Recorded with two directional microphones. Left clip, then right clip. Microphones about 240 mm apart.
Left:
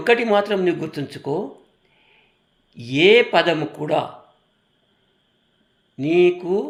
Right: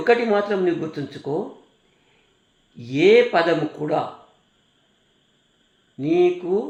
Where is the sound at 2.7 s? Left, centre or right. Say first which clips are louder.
Left 1 dB; left.